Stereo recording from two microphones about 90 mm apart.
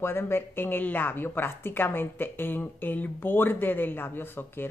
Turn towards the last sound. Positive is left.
turn(degrees=25)  # may be behind; listen again after turning